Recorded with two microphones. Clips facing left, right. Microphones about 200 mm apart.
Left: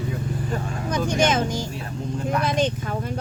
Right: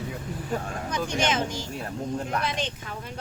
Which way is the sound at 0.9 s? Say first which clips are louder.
Left 6 dB; 45° left (ahead or behind).